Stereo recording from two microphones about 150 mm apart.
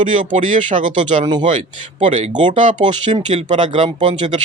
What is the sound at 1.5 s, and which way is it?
Speech, 55° right (ahead or behind).